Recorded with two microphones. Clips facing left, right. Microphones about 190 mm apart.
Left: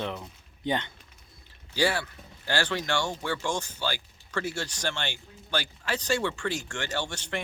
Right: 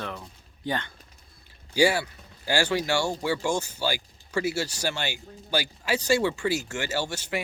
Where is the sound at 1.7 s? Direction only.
10° right (ahead or behind).